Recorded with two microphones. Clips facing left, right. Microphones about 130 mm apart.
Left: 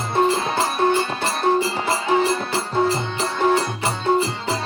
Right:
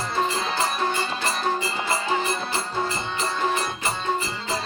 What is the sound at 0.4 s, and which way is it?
Music, 60° left (ahead or behind).